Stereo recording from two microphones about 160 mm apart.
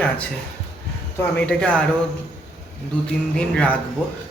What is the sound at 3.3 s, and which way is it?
Speech, 10° left (ahead or behind).